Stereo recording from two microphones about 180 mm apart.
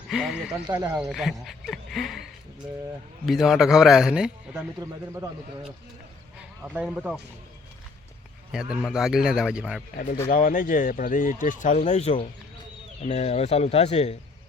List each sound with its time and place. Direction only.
0.1 s a man's voice: centre (ahead or behind)
0.7 s speech: 20° right (ahead or behind)
1.0 s a man's voice: centre (ahead or behind)
4.8 s speech: 15° right (ahead or behind)
6.6 s a man's voice: 10° right (ahead or behind)
8.5 s a man's voice: 5° right (ahead or behind)
10.3 s speech: 50° left (ahead or behind)